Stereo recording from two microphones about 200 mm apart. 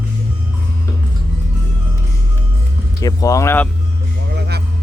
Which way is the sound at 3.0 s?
15° left (ahead or behind).